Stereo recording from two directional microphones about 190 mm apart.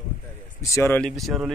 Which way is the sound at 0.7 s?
10° left (ahead or behind).